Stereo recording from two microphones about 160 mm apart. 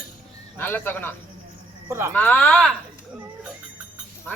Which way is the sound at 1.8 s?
20° right (ahead or behind).